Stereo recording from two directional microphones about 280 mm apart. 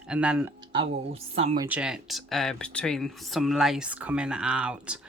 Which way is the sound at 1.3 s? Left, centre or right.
Right.